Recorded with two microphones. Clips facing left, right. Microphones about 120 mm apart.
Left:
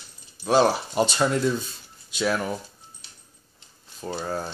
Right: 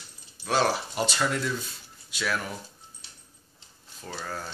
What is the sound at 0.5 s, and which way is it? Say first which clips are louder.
Speech: left 6 dB; 20° left (ahead or behind).